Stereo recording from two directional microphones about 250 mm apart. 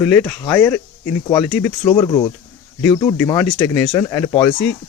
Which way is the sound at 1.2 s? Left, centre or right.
Centre.